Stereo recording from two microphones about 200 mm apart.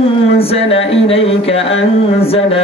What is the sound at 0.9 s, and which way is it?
Speech, 30° left (ahead or behind).